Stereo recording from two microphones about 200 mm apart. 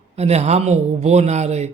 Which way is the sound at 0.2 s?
30° right (ahead or behind).